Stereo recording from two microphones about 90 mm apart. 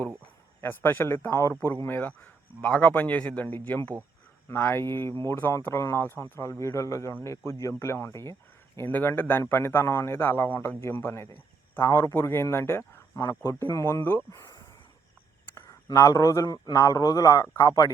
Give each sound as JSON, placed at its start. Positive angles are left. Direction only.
{"t": 0.6, "sound": "a man's voice", "side_deg": 25}
{"t": 8.9, "sound": "a man's voice", "side_deg": 20}
{"t": 14.3, "sound": "a man's voice", "side_deg": 40}